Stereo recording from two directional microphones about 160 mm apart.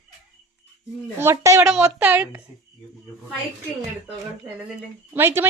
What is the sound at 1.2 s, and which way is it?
Speech, 15° right (ahead or behind).